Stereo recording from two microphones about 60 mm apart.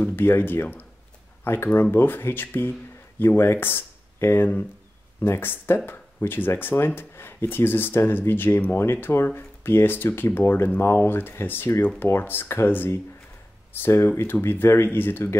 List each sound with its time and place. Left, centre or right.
0.0 s speech: left